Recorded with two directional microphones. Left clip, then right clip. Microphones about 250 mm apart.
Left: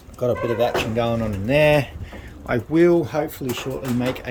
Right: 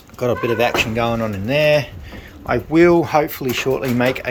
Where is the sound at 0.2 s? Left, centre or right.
Centre.